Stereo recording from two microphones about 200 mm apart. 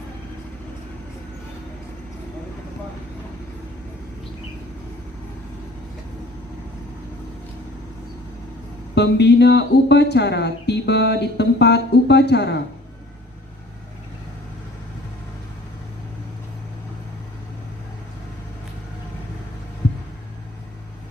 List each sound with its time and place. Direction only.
9.0 s speech: 60° left (ahead or behind)